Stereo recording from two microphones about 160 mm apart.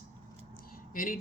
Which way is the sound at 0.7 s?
60° left (ahead or behind).